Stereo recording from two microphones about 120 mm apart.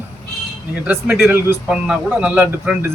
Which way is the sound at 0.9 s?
10° right (ahead or behind).